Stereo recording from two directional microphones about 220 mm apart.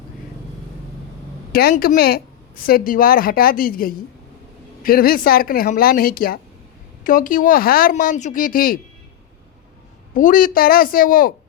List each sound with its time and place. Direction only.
1.5 s speech: 45° left (ahead or behind)
10.2 s speech: 40° left (ahead or behind)